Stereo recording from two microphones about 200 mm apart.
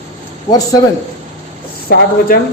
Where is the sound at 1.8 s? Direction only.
50° left (ahead or behind).